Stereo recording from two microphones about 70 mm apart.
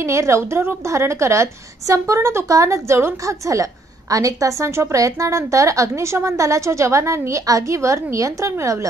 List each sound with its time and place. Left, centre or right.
0.0 s a woman's voice: right